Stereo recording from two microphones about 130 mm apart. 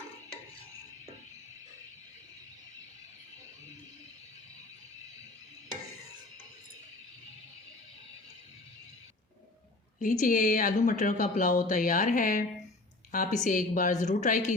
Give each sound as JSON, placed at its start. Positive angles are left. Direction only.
{"t": 10.0, "sound": "a woman's voice", "side_deg": 80}